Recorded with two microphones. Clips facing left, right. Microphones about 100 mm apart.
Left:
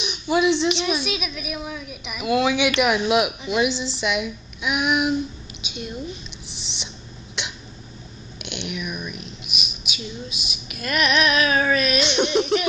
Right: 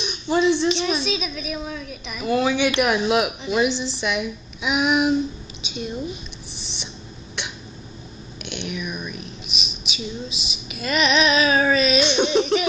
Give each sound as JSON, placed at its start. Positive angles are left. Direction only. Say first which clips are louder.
{"t": 0.3, "sound": "a woman's voice", "louder": "even", "side_deg": 10}
{"t": 4.6, "sound": "female singing", "louder": "right 2 dB", "side_deg": 0}
{"t": 6.5, "sound": "owl", "louder": "even", "side_deg": 70}
{"t": 8.4, "sound": "a sound", "louder": "right 1 dB", "side_deg": 80}
{"t": 8.6, "sound": "a woman's voice", "louder": "even", "side_deg": 10}
{"t": 9.5, "sound": "female singing", "louder": "right 1 dB", "side_deg": 5}